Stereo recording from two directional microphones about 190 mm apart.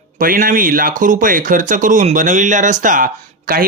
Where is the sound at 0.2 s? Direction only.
50° right (ahead or behind).